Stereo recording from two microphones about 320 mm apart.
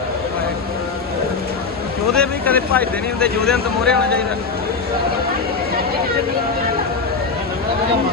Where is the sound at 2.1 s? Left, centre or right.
Centre.